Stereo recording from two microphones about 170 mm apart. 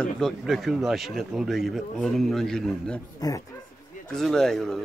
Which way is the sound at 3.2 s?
20° left (ahead or behind).